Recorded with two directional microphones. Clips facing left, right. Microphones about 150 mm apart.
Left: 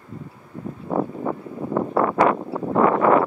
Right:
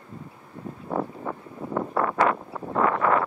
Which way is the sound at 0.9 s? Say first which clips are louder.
Left 5 dB; 45° left (ahead or behind).